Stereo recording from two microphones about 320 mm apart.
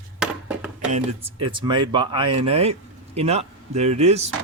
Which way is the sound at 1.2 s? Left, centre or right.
Centre.